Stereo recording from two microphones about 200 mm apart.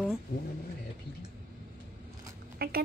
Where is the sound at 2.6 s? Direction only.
50° right (ahead or behind).